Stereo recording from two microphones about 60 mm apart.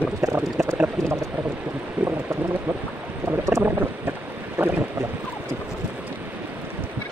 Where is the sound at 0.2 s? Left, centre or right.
Right.